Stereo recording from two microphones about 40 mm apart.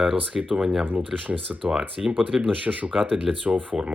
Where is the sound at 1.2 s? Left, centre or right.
Right.